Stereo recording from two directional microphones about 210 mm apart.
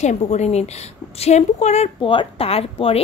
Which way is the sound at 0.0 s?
35° left (ahead or behind).